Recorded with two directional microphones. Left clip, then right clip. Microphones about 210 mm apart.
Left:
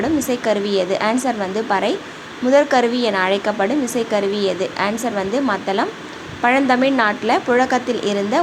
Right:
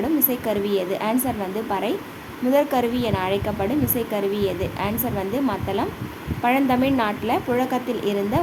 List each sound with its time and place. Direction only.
0.0 s a woman's voice: 5° left (ahead or behind)